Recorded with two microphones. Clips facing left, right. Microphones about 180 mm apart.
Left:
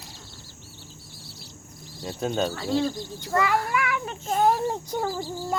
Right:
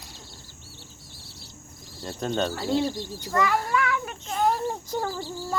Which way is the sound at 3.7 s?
15° left (ahead or behind).